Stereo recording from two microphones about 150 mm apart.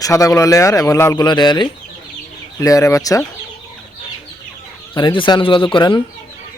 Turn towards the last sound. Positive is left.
turn(degrees=30)  # may be behind; listen again after turning